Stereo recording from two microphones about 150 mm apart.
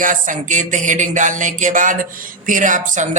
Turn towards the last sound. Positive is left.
turn(degrees=-55)  # may be behind; listen again after turning